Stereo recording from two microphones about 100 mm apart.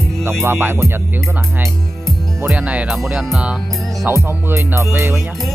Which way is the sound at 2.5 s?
10° right (ahead or behind).